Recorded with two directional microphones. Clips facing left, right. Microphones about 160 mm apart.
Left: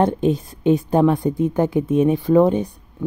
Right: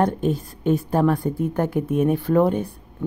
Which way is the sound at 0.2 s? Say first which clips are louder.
Left 4 dB; centre (ahead or behind).